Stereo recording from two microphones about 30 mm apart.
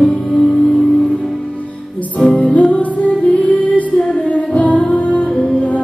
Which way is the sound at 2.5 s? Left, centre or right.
Left.